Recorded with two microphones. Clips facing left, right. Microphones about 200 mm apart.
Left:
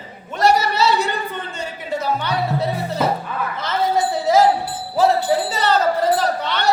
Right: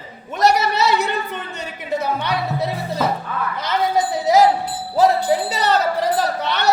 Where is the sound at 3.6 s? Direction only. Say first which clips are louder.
Even; 15° right (ahead or behind).